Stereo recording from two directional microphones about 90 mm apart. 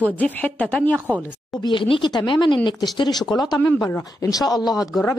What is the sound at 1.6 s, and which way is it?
Speech, 65° left (ahead or behind).